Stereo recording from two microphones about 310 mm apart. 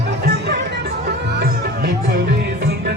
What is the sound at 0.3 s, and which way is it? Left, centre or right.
Music, right.